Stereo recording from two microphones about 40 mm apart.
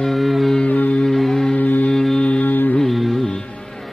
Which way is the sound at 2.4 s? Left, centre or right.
Left.